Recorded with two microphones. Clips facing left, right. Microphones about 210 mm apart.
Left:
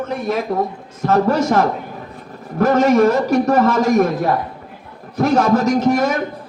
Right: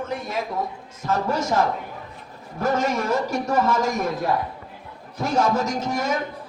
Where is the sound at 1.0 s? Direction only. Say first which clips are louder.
Left 8 dB; 65° left (ahead or behind).